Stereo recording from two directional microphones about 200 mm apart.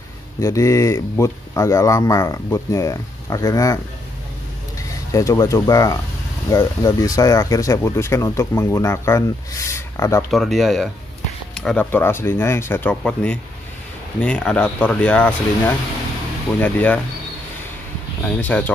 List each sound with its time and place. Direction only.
0.4 s speech: 15° left (ahead or behind)
5.1 s speech: 15° left (ahead or behind)
10.3 s speech: centre (ahead or behind)
18.4 s speech: 10° left (ahead or behind)